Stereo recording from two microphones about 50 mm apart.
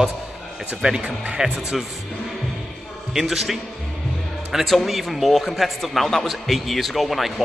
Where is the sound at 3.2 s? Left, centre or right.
Centre.